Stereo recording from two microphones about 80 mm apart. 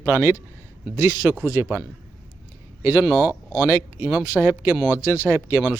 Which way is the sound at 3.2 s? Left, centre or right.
Left.